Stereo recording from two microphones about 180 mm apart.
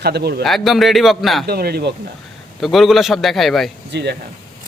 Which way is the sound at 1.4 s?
60° right (ahead or behind).